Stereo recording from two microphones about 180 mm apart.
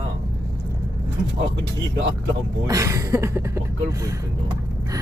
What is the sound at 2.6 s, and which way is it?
Speech, 15° right (ahead or behind).